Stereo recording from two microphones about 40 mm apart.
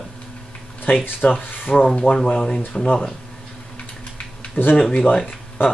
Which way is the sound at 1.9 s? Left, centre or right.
Left.